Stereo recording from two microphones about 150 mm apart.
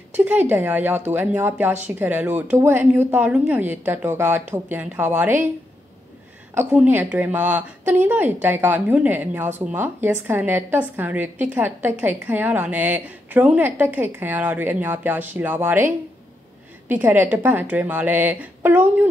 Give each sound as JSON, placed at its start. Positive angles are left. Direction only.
{"t": 0.1, "sound": "a woman's voice", "side_deg": -10}
{"t": 6.7, "sound": "a woman's voice", "side_deg": -10}
{"t": 16.9, "sound": "a woman's voice", "side_deg": -10}